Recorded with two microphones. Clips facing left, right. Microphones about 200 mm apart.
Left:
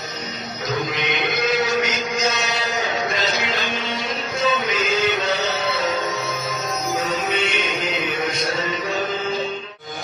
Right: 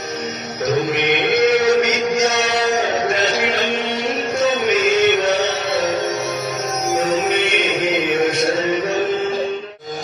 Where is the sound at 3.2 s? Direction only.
75° right (ahead or behind).